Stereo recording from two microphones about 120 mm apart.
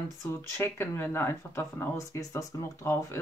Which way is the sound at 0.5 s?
20° left (ahead or behind).